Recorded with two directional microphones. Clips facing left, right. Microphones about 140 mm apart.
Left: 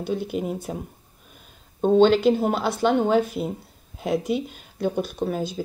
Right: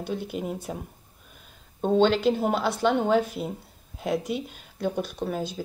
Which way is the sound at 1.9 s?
5° left (ahead or behind).